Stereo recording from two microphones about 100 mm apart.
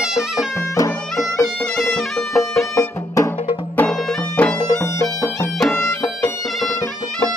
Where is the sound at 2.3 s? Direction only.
30° left (ahead or behind).